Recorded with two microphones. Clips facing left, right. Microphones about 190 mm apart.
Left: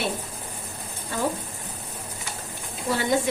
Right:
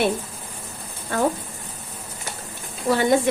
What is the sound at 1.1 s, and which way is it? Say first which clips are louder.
Speech: right 5 dB; 60° right (ahead or behind).